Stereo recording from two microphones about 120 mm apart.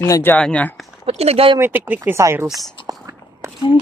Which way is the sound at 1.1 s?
60° right (ahead or behind).